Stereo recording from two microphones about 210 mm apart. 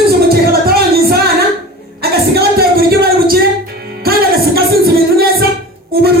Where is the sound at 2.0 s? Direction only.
50° right (ahead or behind).